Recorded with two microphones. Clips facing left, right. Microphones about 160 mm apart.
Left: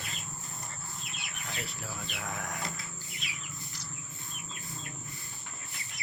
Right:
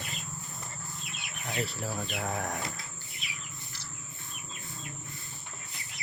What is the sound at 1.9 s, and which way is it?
Speech, 35° right (ahead or behind).